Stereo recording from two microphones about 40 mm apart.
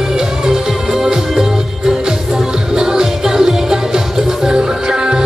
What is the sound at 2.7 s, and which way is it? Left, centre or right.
Music, centre.